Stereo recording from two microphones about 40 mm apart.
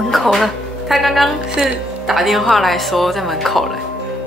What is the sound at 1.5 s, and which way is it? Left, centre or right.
Speech, right.